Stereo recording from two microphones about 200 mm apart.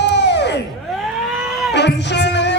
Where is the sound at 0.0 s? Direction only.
60° left (ahead or behind).